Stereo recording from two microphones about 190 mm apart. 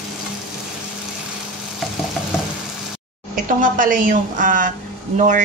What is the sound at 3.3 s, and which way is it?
A woman's voice, 45° right (ahead or behind).